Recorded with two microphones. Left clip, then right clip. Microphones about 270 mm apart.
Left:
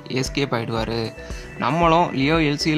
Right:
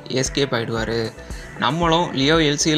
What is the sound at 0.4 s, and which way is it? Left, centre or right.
Speech, centre.